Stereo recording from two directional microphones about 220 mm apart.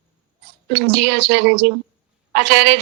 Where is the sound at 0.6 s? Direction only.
50° right (ahead or behind).